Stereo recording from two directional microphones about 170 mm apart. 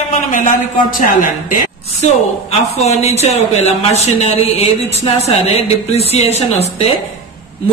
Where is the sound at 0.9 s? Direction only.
55° left (ahead or behind).